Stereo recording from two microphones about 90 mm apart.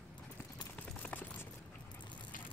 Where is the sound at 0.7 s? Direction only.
15° left (ahead or behind).